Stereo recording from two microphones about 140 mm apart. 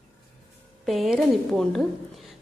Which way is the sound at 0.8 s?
Centre (ahead or behind).